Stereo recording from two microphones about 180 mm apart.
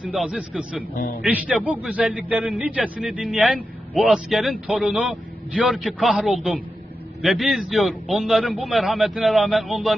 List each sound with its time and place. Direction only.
0.0 s a man's voice: 5° right (ahead or behind)
0.9 s speech: 55° left (ahead or behind)
1.2 s a man's voice: 5° right (ahead or behind)